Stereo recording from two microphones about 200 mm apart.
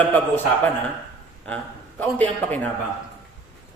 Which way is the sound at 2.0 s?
10° left (ahead or behind).